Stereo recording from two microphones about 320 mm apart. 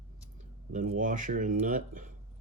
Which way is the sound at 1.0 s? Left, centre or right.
Right.